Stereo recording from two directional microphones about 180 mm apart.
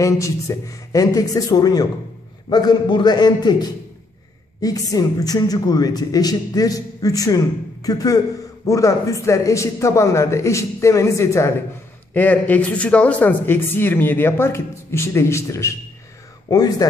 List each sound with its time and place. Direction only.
0.0 s a man's voice: 20° left (ahead or behind)